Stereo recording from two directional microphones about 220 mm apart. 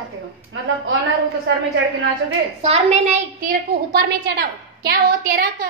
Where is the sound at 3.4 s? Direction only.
45° right (ahead or behind).